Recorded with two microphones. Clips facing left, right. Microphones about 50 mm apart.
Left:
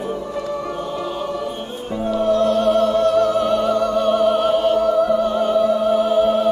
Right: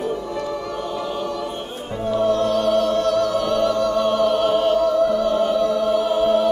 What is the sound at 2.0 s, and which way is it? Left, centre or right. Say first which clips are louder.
Music: even; centre.